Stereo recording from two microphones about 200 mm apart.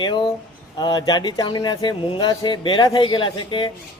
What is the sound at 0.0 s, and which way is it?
A man's voice, 20° left (ahead or behind).